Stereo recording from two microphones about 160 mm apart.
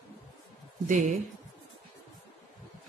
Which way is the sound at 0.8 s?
50° right (ahead or behind).